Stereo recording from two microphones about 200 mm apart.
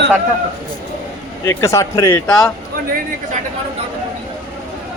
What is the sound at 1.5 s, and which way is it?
Speech, 15° left (ahead or behind).